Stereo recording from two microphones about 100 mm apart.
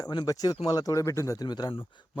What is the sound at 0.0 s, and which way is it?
Speech, 45° left (ahead or behind).